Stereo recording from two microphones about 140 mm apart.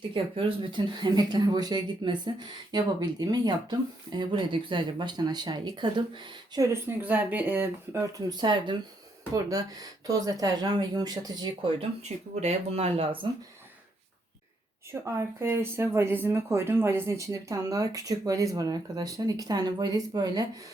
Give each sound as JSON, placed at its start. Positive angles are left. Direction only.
{"t": 0.1, "sound": "speech", "side_deg": -40}
{"t": 6.8, "sound": "speech", "side_deg": -15}
{"t": 8.3, "sound": "speech", "side_deg": -30}
{"t": 12.0, "sound": "speech", "side_deg": -55}
{"t": 15.0, "sound": "speech", "side_deg": -20}